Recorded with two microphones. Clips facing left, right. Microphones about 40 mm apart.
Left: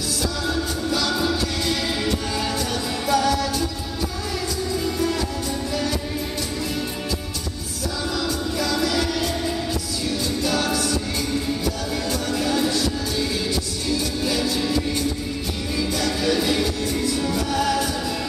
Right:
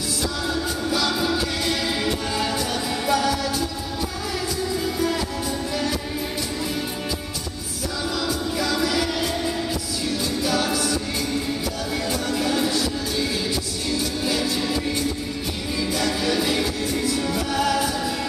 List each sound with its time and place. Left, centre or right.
0.5 s music: centre
4.7 s music: centre
8.3 s music: centre
12.1 s music: centre